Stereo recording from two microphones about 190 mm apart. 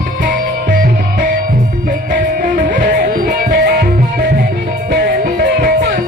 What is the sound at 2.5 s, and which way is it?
Music, 45° right (ahead or behind).